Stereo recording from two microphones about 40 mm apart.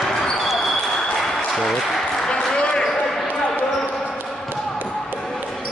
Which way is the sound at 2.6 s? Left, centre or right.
Left.